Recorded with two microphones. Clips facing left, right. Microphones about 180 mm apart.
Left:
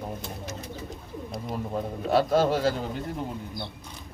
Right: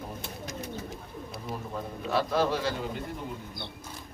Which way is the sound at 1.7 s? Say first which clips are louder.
Left 6 dB; 40° left (ahead or behind).